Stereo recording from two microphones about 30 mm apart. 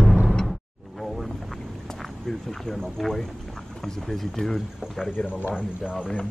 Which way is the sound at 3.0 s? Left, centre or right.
Centre.